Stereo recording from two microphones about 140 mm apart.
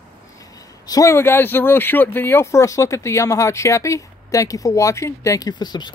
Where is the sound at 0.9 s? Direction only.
25° left (ahead or behind).